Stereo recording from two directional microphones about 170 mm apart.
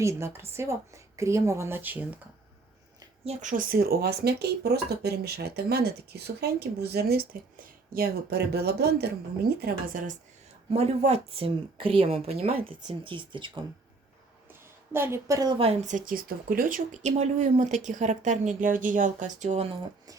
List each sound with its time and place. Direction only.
0.0 s speech: 15° right (ahead or behind)
3.2 s speech: 50° right (ahead or behind); by 9.0 s 70° right (ahead or behind)
9.6 s speech: 60° right (ahead or behind)
10.7 s speech: 35° right (ahead or behind)
14.9 s speech: 15° right (ahead or behind); by 19.6 s 40° right (ahead or behind)